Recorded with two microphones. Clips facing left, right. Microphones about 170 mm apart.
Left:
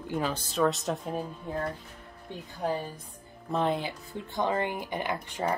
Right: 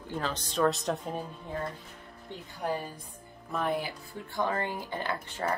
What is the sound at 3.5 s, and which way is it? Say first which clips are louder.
Speech: left 3 dB; 20° left (ahead or behind).